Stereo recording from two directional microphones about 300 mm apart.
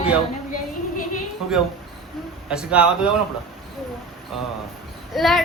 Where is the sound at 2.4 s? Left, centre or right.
Centre.